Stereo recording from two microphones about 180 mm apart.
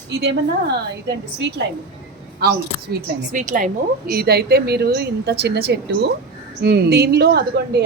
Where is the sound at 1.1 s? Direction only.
70° right (ahead or behind).